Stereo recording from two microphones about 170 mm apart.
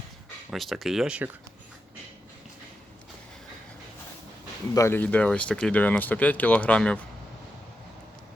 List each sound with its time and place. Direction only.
0.5 s speech: centre (ahead or behind)
4.7 s speech: 15° left (ahead or behind)